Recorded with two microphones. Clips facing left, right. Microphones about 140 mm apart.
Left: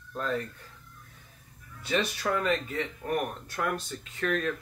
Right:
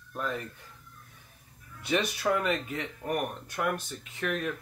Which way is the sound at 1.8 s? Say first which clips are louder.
Right 1 dB; 15° right (ahead or behind).